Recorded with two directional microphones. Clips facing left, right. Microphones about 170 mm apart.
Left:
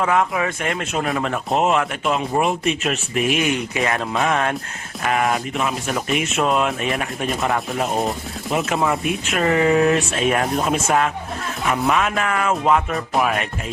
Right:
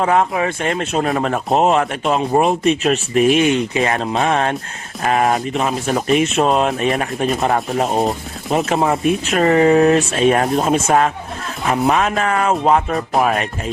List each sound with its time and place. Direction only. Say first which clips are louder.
0.0 s speech: right 3 dB; 35° right (ahead or behind)